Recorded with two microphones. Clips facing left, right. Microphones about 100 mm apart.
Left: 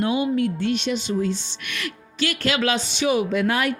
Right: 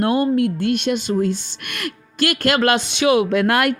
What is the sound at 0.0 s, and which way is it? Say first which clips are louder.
A woman's voice: right 4 dB; 50° right (ahead or behind).